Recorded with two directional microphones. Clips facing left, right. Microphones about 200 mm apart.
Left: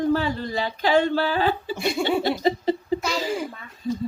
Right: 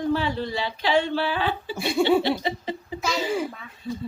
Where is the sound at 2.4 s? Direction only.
40° left (ahead or behind).